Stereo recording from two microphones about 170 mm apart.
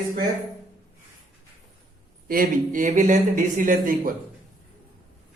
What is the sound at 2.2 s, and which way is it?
Speech, 55° right (ahead or behind).